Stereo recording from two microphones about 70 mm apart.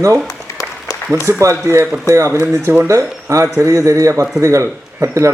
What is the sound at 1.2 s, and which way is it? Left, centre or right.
A man's voice, right.